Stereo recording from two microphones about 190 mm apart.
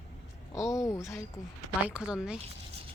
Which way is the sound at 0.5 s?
15° left (ahead or behind).